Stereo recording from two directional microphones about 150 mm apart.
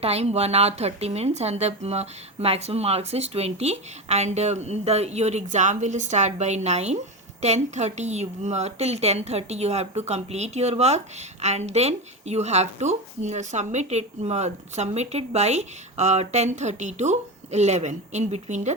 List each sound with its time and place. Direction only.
0.0 s a woman's voice: 45° right (ahead or behind)